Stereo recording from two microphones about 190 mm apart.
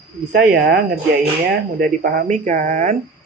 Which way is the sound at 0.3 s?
50° right (ahead or behind).